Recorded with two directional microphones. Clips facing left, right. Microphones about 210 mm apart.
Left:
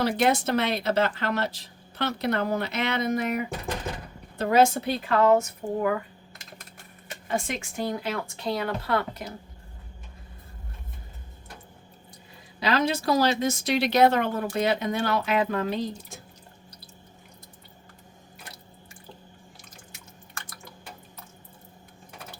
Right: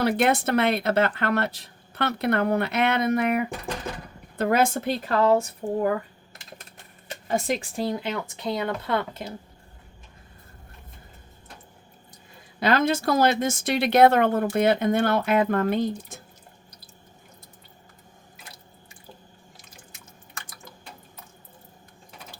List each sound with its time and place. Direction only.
0.0 s a woman's voice: 60° right (ahead or behind)
5.2 s speech: 30° right (ahead or behind)
7.3 s speech: 40° right (ahead or behind)
12.5 s speech: 50° right (ahead or behind)